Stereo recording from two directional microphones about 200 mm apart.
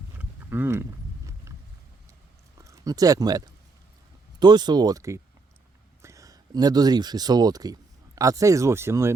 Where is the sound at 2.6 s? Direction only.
15° right (ahead or behind).